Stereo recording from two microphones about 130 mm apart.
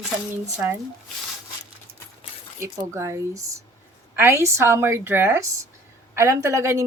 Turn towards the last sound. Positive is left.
turn(degrees=-20)  # may be behind; listen again after turning